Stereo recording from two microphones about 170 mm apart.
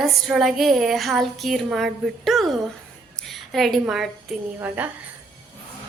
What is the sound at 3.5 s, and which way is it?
A woman's voice, centre (ahead or behind).